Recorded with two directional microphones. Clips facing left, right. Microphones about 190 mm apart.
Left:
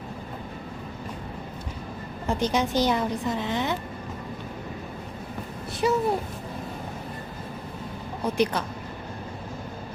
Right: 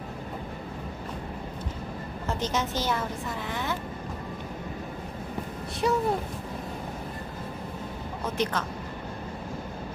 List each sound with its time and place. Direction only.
2.2 s a woman's voice: 15° left (ahead or behind)
5.8 s speech: 5° left (ahead or behind)
8.2 s a woman's voice: 10° left (ahead or behind)